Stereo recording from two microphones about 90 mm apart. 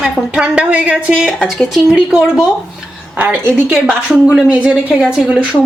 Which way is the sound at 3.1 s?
20° right (ahead or behind).